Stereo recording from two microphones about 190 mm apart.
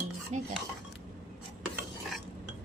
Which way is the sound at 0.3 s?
35° right (ahead or behind).